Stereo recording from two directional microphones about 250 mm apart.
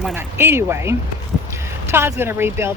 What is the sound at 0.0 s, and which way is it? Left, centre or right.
Speech, centre.